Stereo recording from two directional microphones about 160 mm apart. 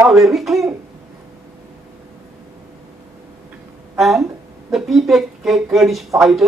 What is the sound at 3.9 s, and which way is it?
Speech, centre (ahead or behind).